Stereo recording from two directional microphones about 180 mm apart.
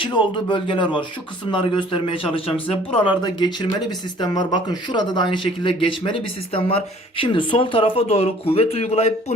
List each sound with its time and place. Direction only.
0.0 s speech: 25° left (ahead or behind)